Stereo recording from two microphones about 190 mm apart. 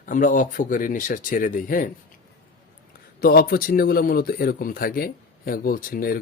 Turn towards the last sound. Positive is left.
turn(degrees=50)  # may be behind; listen again after turning